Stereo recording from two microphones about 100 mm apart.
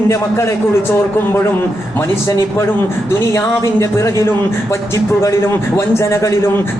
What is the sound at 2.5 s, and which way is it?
A man's voice, 25° left (ahead or behind).